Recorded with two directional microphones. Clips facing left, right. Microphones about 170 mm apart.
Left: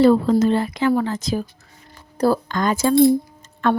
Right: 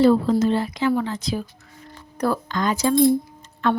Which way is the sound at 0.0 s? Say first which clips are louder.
Left 2 dB; 55° left (ahead or behind).